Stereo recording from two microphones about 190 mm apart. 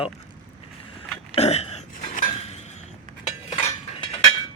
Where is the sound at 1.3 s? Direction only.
35° left (ahead or behind).